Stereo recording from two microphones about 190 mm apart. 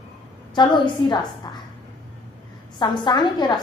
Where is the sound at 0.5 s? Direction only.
25° left (ahead or behind).